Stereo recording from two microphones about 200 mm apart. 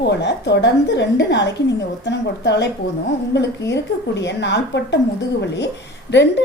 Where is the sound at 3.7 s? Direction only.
60° left (ahead or behind).